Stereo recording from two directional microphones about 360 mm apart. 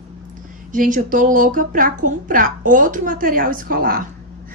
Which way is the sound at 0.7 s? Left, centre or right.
Right.